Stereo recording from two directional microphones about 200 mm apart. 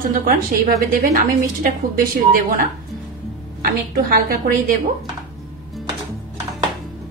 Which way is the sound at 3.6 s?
50° right (ahead or behind).